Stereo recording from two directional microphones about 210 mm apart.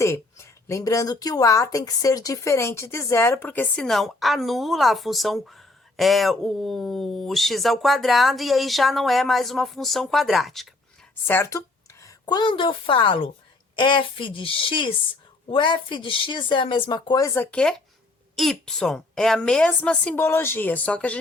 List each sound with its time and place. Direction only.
0.0 s a woman's voice: 15° left (ahead or behind)